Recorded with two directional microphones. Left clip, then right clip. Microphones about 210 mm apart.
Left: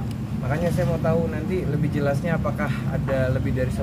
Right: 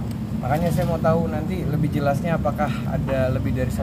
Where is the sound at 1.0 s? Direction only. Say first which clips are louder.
Right 2 dB; 5° left (ahead or behind).